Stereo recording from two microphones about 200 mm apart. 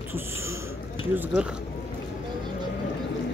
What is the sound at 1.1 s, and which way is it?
Speech, 5° right (ahead or behind).